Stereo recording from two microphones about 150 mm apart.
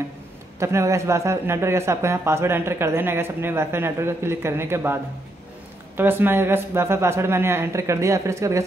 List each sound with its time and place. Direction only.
0.6 s a man's voice: 20° right (ahead or behind)
5.9 s a man's voice: 15° right (ahead or behind)